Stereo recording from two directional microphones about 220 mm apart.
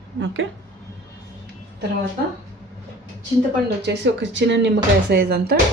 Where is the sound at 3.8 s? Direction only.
50° right (ahead or behind).